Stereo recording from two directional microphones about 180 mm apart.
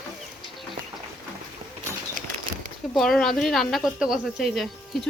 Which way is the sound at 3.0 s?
Centre (ahead or behind).